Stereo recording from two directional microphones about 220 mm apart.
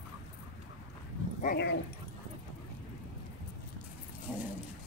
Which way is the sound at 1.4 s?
45° left (ahead or behind).